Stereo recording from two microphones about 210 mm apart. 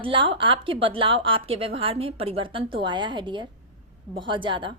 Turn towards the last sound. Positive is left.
turn(degrees=-25)  # may be behind; listen again after turning